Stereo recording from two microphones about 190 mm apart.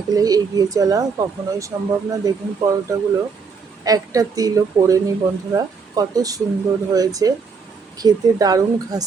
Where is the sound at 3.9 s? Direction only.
20° right (ahead or behind).